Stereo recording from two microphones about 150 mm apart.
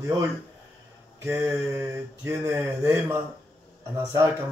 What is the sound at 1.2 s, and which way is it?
Speech, 15° right (ahead or behind).